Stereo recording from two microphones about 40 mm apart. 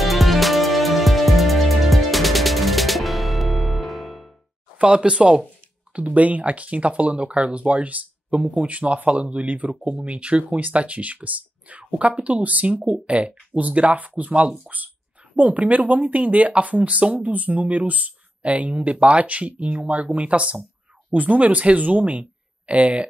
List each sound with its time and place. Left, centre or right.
0.0 s music: centre
4.7 s speech: right
5.9 s speech: right